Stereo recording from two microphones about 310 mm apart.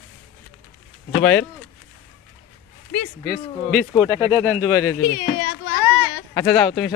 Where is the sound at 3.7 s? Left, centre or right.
Centre.